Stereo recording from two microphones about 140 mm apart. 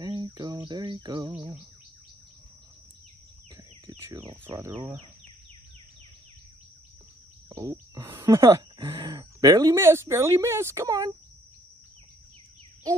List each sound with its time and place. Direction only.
0.0 s a sound: 30° right (ahead or behind)
3.8 s bird: 35° right (ahead or behind)
4.2 s speech: 40° right (ahead or behind)
7.4 s speech: 25° right (ahead or behind)